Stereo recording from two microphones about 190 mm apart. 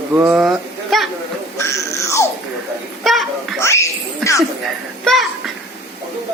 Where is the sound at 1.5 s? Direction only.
15° left (ahead or behind).